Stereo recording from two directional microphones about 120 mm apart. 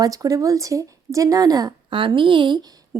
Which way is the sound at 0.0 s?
30° right (ahead or behind).